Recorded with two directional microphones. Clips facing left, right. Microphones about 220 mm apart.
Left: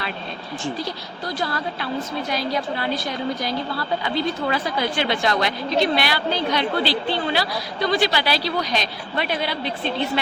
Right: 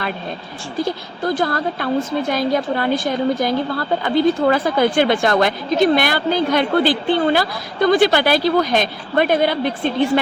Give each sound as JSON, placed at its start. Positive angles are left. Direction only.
{"t": 0.8, "sound": "a woman's voice", "side_deg": -50}